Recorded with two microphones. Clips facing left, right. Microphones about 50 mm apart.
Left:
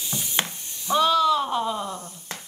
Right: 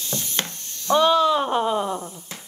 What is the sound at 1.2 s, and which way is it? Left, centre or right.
Speech, right.